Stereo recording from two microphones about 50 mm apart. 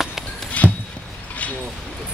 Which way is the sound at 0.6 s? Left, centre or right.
Left.